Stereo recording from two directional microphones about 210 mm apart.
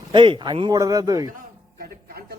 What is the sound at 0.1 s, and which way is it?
A man's voice, 20° right (ahead or behind).